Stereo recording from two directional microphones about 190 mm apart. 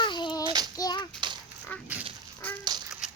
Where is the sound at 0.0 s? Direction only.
25° left (ahead or behind).